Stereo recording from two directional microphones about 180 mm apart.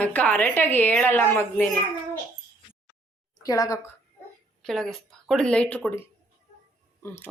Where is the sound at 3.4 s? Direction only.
20° left (ahead or behind).